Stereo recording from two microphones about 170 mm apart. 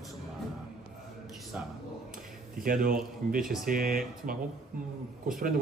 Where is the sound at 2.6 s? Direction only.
55° right (ahead or behind).